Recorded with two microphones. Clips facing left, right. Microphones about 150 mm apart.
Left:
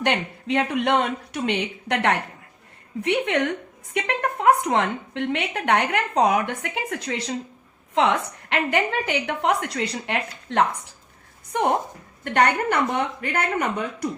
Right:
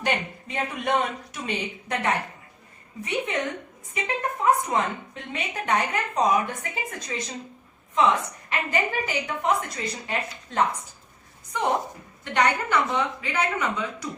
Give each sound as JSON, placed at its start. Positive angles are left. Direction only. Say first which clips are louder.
{"t": 0.0, "sound": "a woman's voice", "louder": "left 3 dB", "side_deg": 70}
{"t": 11.5, "sound": "speech", "louder": "left 3 dB", "side_deg": 60}